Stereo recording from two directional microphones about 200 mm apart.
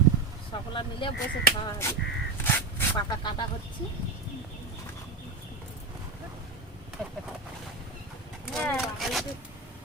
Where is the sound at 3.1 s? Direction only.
20° left (ahead or behind).